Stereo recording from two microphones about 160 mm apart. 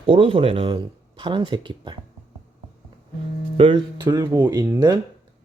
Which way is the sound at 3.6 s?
35° right (ahead or behind).